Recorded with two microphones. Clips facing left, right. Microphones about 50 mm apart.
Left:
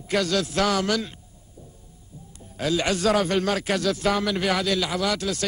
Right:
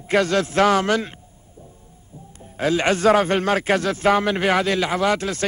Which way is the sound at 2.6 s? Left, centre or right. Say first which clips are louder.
Right 5 dB; right.